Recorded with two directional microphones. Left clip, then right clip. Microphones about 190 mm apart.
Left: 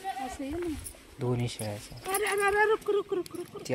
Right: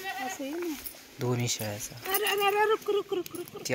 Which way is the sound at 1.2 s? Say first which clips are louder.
Right 2 dB; 10° left (ahead or behind).